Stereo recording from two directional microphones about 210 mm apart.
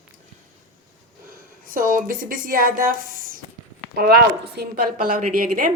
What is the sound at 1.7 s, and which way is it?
A woman's voice, 40° right (ahead or behind).